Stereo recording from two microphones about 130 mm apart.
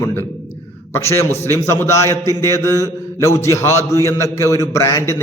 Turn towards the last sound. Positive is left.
turn(degrees=20)  # may be behind; listen again after turning